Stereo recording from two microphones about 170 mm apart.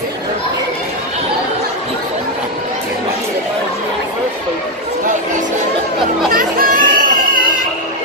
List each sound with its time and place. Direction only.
6.3 s music: 55° right (ahead or behind)